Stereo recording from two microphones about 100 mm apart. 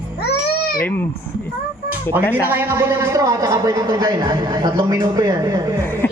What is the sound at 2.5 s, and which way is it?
Speech, 20° right (ahead or behind).